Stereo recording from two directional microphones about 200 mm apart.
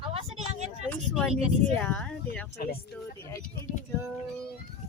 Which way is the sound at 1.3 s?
30° right (ahead or behind).